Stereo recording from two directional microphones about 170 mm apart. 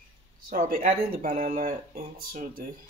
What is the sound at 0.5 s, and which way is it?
Speech, 55° right (ahead or behind).